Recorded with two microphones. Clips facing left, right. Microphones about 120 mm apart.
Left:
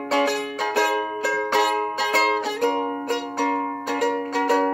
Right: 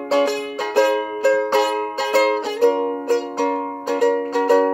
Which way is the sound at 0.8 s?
Centre (ahead or behind).